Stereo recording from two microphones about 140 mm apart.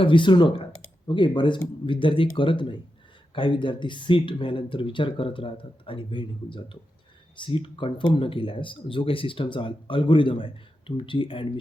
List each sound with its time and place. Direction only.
0.0 s speech: 35° left (ahead or behind)